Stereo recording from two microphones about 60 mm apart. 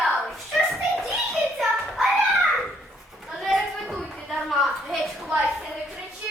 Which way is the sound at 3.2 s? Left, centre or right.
Centre.